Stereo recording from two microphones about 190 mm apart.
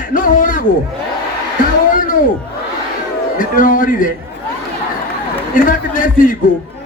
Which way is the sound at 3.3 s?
45° left (ahead or behind).